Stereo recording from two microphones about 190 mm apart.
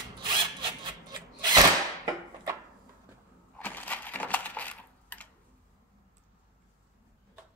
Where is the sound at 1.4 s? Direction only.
20° right (ahead or behind).